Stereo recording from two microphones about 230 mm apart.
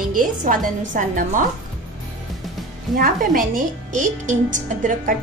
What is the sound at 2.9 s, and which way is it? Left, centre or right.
A woman's voice, right.